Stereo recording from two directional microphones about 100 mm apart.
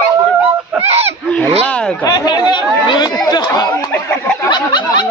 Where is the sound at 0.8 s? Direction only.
90° right.